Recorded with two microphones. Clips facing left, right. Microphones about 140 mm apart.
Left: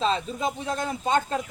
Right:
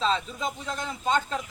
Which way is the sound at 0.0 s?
45° left (ahead or behind).